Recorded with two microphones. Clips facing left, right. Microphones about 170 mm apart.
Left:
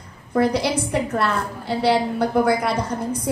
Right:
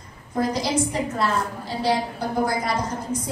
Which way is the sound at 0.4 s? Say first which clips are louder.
Left 3 dB; 65° left (ahead or behind).